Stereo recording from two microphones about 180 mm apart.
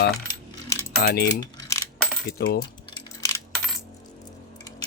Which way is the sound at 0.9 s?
60° left (ahead or behind).